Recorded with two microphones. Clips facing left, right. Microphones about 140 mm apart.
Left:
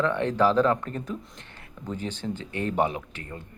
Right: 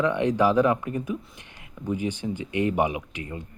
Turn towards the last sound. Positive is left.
turn(degrees=-15)  # may be behind; listen again after turning